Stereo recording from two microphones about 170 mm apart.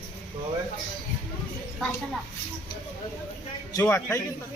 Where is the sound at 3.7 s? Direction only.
15° left (ahead or behind).